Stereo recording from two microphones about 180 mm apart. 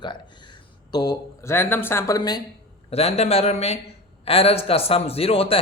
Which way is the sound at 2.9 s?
35° left (ahead or behind).